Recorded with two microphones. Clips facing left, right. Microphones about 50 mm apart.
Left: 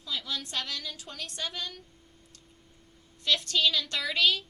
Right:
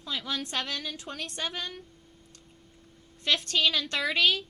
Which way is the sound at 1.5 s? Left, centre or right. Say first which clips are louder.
Right 2 dB; centre.